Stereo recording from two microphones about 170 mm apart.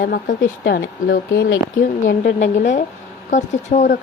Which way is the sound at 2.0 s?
55° left (ahead or behind).